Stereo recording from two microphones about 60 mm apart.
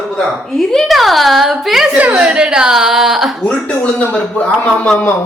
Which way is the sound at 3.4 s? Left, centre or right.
Centre.